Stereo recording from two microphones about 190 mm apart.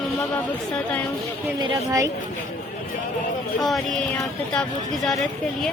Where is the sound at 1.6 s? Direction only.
15° right (ahead or behind).